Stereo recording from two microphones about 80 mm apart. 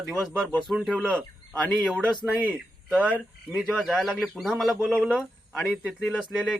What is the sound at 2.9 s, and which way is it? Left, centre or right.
Speech, centre.